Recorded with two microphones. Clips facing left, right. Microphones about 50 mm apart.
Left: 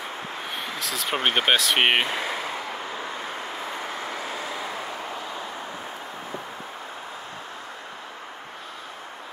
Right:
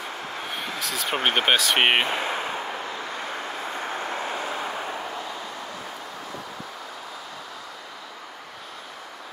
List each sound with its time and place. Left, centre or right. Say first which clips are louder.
0.6 s a sound: right 1 dB; centre
1.2 s speech: even; centre
2.2 s speech: right 2 dB; right
3.9 s vehicle: right 2 dB; right